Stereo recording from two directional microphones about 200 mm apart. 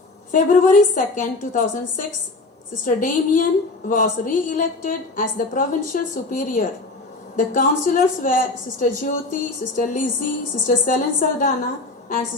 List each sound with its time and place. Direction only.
0.3 s a woman's voice: 40° left (ahead or behind)